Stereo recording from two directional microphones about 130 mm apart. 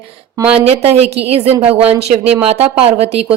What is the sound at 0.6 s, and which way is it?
Speech, 50° right (ahead or behind).